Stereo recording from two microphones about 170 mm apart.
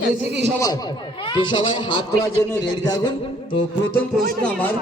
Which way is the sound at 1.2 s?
25° left (ahead or behind).